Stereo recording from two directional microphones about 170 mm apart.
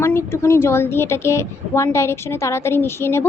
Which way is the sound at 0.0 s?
15° left (ahead or behind).